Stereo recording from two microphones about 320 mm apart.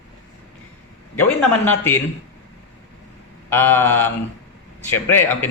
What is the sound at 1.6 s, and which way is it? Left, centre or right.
Speech, centre.